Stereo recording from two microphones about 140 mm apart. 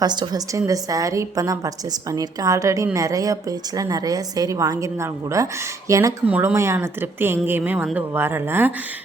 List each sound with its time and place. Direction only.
0.0 s a woman's voice: 30° right (ahead or behind)
6.2 s a woman's voice: 10° right (ahead or behind)